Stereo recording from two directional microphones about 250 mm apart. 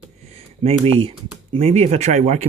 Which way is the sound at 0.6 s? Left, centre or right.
Right.